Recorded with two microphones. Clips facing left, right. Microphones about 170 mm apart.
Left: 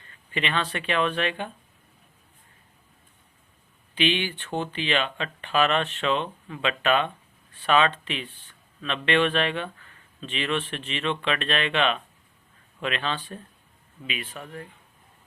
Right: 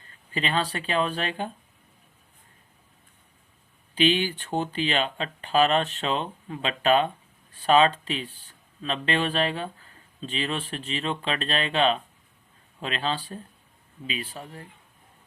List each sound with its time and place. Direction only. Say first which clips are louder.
0.3 s speech: right 1 dB; 35° right (ahead or behind)
3.9 s speech: right 3 dB; 40° right (ahead or behind)